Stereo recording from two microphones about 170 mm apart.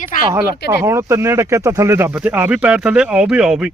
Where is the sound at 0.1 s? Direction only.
50° left (ahead or behind).